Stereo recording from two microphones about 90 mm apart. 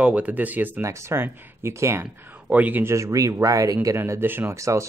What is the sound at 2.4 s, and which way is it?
Speech, 15° right (ahead or behind).